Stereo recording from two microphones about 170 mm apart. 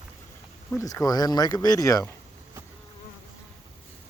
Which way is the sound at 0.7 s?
20° left (ahead or behind).